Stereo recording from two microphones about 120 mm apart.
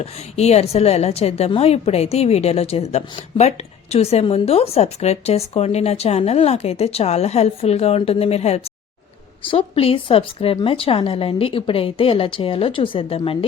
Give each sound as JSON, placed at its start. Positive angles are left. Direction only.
{"t": 0.0, "sound": "a woman's voice", "side_deg": 60}